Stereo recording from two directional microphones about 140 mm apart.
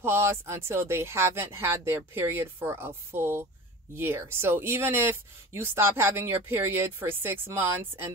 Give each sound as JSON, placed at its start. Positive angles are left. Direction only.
{"t": 0.0, "sound": "speech", "side_deg": -20}